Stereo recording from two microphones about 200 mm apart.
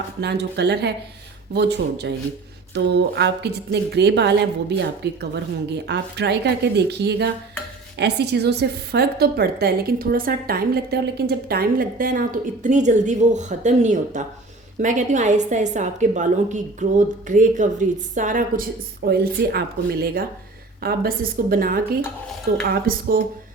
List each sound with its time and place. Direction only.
0.2 s a woman's voice: 55° right (ahead or behind)